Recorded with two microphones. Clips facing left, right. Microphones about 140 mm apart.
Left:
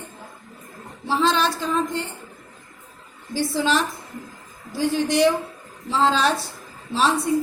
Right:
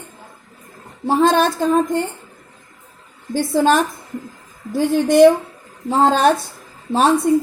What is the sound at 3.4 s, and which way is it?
A woman's voice, 50° right (ahead or behind).